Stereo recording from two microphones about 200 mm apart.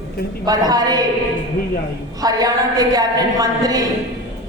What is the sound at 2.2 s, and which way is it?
A woman's voice, 20° right (ahead or behind).